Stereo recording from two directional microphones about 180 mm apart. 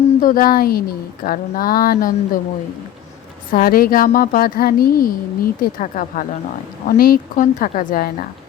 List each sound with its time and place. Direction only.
0.2 s speech: 50° left (ahead or behind)
3.5 s speech: 55° left (ahead or behind)